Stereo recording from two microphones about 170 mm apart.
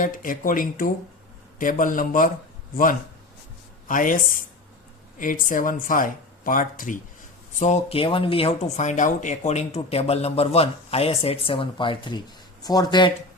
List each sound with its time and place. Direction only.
0.0 s speech: 55° left (ahead or behind)
3.8 s speech: 50° left (ahead or behind)
7.6 s speech: 40° left (ahead or behind)